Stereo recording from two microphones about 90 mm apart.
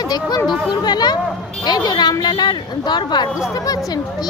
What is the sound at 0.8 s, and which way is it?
A child's voice, 50° left (ahead or behind).